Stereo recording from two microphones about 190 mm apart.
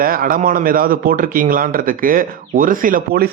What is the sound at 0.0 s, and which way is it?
Speech, 50° right (ahead or behind).